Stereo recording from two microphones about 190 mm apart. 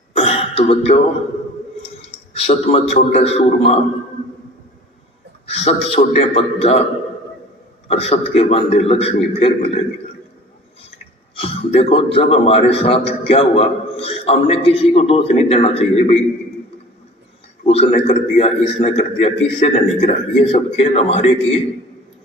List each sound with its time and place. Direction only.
0.1 s throat clearing: 30° left (ahead or behind)
2.0 s a man's voice: 35° left (ahead or behind)
5.5 s a man's voice: 35° left (ahead or behind)
7.9 s a man's voice: 35° left (ahead or behind)
11.3 s a man's voice: 30° left (ahead or behind)
17.7 s a man's voice: 30° left (ahead or behind)